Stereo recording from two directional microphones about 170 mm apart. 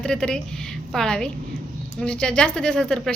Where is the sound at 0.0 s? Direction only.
5° left (ahead or behind).